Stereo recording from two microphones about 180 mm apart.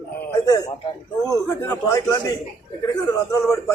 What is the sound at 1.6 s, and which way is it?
Speech, 15° left (ahead or behind).